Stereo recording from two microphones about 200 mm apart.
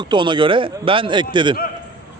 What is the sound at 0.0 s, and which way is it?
A man's voice, 25° right (ahead or behind).